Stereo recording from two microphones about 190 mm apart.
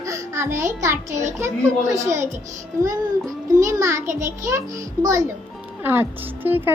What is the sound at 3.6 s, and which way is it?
Speech, 15° right (ahead or behind).